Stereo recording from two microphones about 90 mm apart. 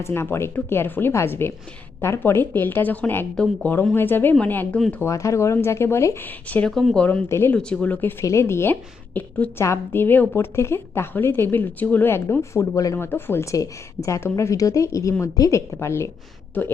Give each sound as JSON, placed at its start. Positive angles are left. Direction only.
{"t": 0.0, "sound": "a woman's voice", "side_deg": 30}
{"t": 5.0, "sound": "a woman's voice", "side_deg": 35}
{"t": 6.2, "sound": "speech", "side_deg": 20}
{"t": 6.7, "sound": "speech", "side_deg": 5}
{"t": 7.0, "sound": "a woman's voice", "side_deg": 20}
{"t": 7.3, "sound": "a woman's voice", "side_deg": 30}
{"t": 7.5, "sound": "speech", "side_deg": 15}
{"t": 8.2, "sound": "a woman's voice", "side_deg": 35}
{"t": 13.0, "sound": "a woman's voice", "side_deg": 25}